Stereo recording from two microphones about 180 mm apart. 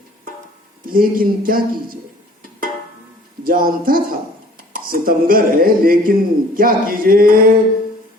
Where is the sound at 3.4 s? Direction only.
50° right (ahead or behind).